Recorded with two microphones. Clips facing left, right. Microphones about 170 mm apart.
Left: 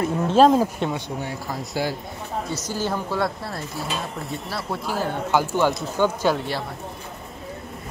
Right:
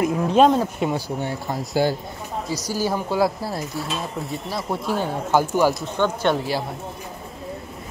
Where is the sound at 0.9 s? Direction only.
30° right (ahead or behind).